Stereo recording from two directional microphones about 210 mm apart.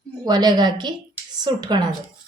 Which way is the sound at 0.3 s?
20° right (ahead or behind).